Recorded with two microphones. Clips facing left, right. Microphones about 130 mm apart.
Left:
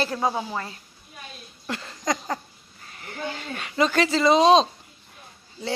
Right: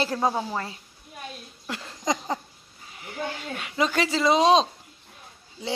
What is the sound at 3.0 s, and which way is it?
Speech, 10° right (ahead or behind).